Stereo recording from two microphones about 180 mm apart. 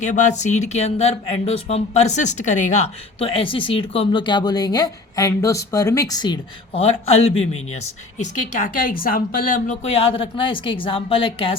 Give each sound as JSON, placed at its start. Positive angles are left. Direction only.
{"t": 0.0, "sound": "speech", "side_deg": 40}
{"t": 7.1, "sound": "speech", "side_deg": 35}
{"t": 8.2, "sound": "speech", "side_deg": 50}